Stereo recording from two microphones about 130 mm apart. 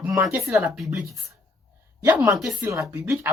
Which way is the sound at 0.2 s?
15° right (ahead or behind).